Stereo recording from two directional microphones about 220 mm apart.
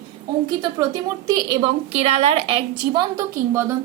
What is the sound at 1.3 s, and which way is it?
A woman's voice, 20° right (ahead or behind).